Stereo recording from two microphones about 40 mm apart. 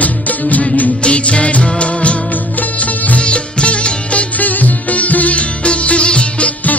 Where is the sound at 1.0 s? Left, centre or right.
Left.